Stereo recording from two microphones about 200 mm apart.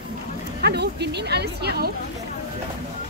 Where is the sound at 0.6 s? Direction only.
55° right (ahead or behind).